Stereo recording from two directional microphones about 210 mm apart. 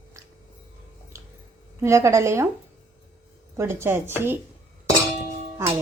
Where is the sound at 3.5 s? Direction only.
10° right (ahead or behind).